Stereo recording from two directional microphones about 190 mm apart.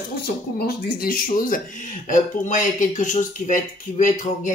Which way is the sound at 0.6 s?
50° left (ahead or behind).